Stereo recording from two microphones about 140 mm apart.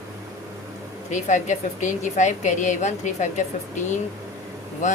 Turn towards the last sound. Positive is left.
turn(degrees=60)  # may be behind; listen again after turning